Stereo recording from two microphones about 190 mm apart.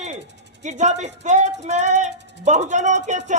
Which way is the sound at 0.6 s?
40° right (ahead or behind).